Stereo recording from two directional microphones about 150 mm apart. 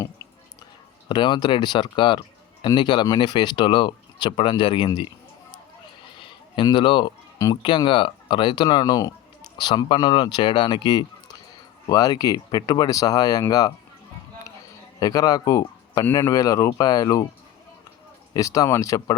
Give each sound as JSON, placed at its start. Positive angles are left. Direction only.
{"t": 1.0, "sound": "speech", "side_deg": 30}
{"t": 6.1, "sound": "a sound", "side_deg": 35}
{"t": 7.6, "sound": "speech", "side_deg": 35}
{"t": 14.9, "sound": "a man's voice", "side_deg": 25}
{"t": 18.3, "sound": "speech", "side_deg": 20}